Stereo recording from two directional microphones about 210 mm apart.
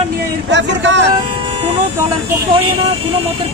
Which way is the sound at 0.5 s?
60° right (ahead or behind).